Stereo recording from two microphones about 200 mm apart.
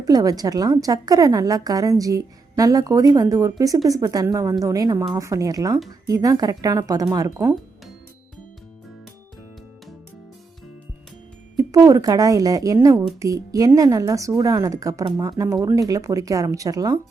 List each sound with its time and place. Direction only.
0.0 s a woman's voice: 20° right (ahead or behind)
11.5 s a woman's voice: 20° right (ahead or behind)